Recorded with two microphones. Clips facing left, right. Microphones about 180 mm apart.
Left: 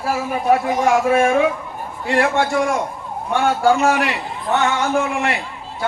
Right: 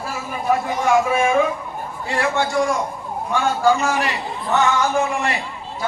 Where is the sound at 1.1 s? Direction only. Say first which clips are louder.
Left 2 dB; 65° left (ahead or behind).